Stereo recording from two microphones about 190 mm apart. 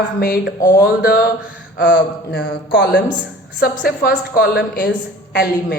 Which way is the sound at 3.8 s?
55° left (ahead or behind).